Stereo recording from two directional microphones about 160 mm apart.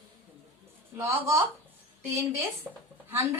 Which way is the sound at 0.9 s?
20° right (ahead or behind).